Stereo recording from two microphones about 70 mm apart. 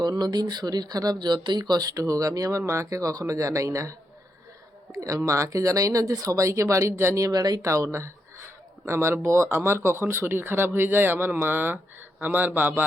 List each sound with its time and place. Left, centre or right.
0.0 s speech: right
7.3 s speech: right
7.6 s speech: right